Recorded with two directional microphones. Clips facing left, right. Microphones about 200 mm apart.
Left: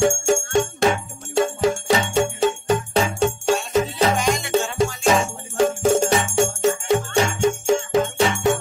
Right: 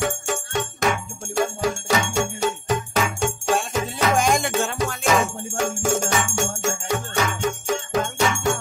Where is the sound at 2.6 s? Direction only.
30° left (ahead or behind).